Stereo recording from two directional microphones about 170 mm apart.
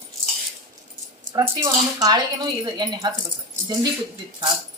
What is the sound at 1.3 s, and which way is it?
Speech, 20° right (ahead or behind).